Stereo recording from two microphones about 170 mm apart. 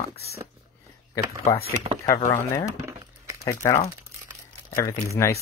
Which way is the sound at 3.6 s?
15° left (ahead or behind).